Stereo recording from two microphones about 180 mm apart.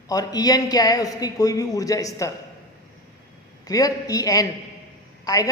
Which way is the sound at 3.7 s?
20° left (ahead or behind).